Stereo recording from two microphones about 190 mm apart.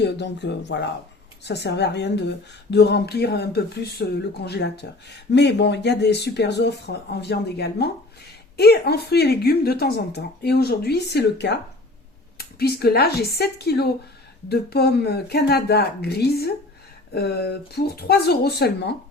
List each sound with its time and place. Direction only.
0.0 s a woman's voice: 65° left (ahead or behind)